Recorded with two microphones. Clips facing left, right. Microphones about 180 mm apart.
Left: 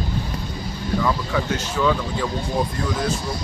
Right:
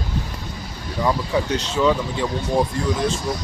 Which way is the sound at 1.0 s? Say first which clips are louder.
Right 3 dB; 20° right (ahead or behind).